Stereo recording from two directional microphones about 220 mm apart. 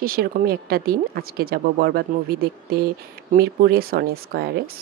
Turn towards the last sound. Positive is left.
turn(degrees=-45)  # may be behind; listen again after turning